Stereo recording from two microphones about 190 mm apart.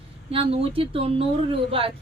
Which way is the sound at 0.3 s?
30° right (ahead or behind).